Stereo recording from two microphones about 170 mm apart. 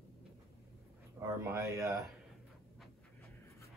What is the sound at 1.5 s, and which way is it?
Speech, 15° right (ahead or behind).